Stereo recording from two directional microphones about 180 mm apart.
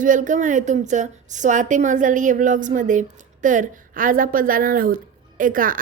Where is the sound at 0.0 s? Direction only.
45° right (ahead or behind).